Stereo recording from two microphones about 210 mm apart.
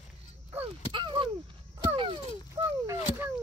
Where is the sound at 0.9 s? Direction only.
25° right (ahead or behind).